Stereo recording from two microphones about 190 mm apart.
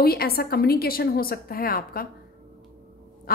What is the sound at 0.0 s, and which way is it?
A woman's voice, 55° left (ahead or behind).